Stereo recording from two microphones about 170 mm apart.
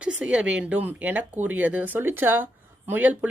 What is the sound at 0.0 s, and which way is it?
Speech, 5° right (ahead or behind).